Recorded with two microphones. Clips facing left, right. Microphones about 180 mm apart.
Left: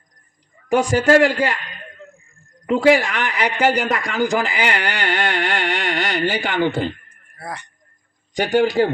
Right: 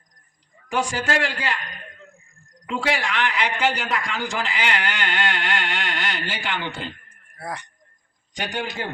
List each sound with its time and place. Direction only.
0.7 s a man's voice: 40° left (ahead or behind)
2.6 s a man's voice: 45° left (ahead or behind)
8.4 s a man's voice: 40° left (ahead or behind)